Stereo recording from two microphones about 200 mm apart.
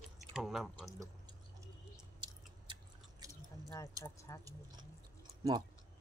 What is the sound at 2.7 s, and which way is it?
Chewing, 20° right (ahead or behind).